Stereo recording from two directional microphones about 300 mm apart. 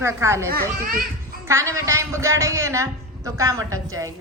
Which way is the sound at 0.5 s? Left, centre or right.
Right.